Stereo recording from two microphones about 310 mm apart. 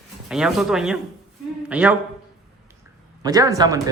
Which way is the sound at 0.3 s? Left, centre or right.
Centre.